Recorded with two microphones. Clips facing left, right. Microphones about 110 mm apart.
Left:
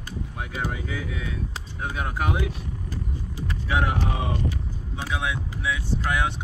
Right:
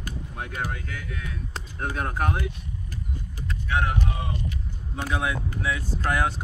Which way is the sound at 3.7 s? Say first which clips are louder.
Left 1 dB; 90° left.